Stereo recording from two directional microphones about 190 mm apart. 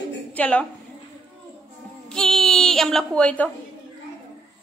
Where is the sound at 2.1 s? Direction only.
5° left (ahead or behind).